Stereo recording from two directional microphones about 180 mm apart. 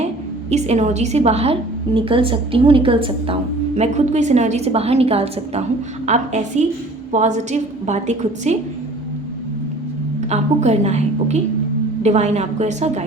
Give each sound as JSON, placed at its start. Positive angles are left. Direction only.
{"t": 0.5, "sound": "a woman's voice", "side_deg": -40}
{"t": 3.8, "sound": "a woman's voice", "side_deg": -40}
{"t": 10.2, "sound": "a woman's voice", "side_deg": -40}